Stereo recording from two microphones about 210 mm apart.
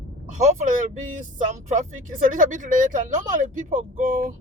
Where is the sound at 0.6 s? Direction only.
35° right (ahead or behind).